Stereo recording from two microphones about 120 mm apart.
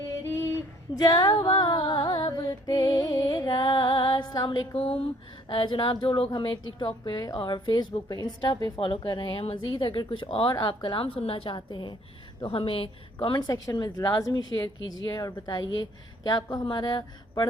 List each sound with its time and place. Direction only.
0.3 s a sound: 20° left (ahead or behind)
0.9 s a sound: 35° left (ahead or behind)
3.1 s music: 30° left (ahead or behind)
4.7 s a woman's voice: 50° left (ahead or behind)
9.7 s a woman's voice: 35° left (ahead or behind)
13.5 s a woman's voice: 30° left (ahead or behind)